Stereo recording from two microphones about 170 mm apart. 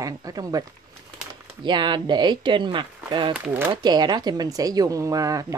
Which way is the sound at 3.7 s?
25° right (ahead or behind).